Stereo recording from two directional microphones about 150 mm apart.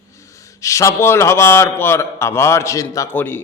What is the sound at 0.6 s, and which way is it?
A man's voice, 20° left (ahead or behind).